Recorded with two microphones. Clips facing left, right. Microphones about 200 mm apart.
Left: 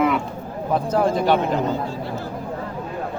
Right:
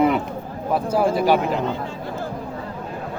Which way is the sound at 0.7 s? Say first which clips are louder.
Even; 5° right (ahead or behind).